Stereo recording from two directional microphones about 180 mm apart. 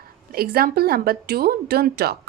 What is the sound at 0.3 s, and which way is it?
A woman's voice, 60° right (ahead or behind).